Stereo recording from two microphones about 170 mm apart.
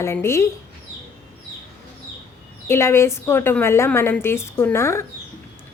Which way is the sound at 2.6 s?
15° left (ahead or behind).